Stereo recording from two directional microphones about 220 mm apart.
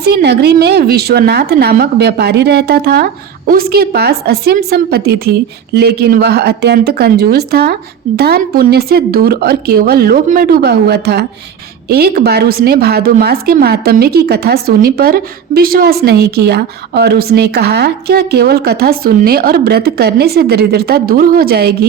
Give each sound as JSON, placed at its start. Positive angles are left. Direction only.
{"t": 0.0, "sound": "a woman's voice", "side_deg": -45}